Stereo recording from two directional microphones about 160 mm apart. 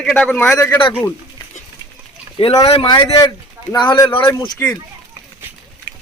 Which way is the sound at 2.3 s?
25° left (ahead or behind).